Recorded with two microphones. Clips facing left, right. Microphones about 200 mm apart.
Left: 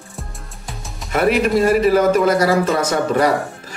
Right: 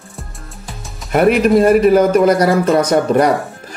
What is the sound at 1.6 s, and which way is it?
Speech, 55° right (ahead or behind).